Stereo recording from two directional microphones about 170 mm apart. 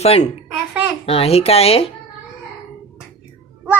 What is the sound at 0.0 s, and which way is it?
Speech, 40° left (ahead or behind).